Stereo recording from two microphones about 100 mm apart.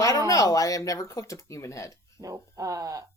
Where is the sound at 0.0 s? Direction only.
35° left (ahead or behind).